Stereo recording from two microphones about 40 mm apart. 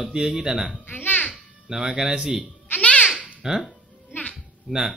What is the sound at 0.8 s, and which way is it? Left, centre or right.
Babbling, left.